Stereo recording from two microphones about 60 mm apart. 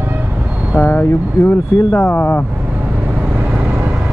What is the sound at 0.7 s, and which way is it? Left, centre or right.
Speech, left.